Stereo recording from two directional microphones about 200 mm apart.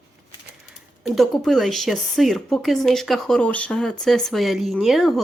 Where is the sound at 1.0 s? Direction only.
Centre (ahead or behind).